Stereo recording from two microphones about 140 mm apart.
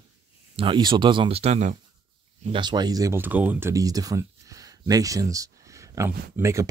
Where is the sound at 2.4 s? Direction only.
35° right (ahead or behind).